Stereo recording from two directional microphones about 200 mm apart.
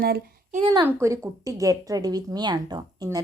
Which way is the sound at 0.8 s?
15° right (ahead or behind).